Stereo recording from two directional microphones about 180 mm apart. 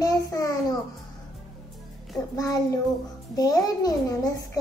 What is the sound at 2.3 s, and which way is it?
Speech, 20° left (ahead or behind).